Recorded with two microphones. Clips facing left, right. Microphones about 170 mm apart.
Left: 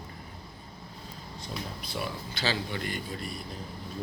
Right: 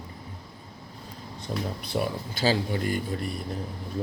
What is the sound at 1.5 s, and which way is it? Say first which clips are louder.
Speech: right 8 dB; 50° right (ahead or behind).